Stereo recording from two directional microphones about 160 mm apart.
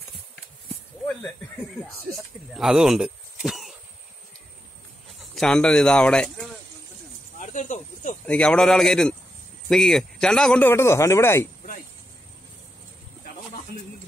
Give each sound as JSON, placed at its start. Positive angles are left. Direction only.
{"t": 2.5, "sound": "speech", "side_deg": -5}
{"t": 5.3, "sound": "speech", "side_deg": 5}
{"t": 7.3, "sound": "speech", "side_deg": 50}
{"t": 8.3, "sound": "speech", "side_deg": 5}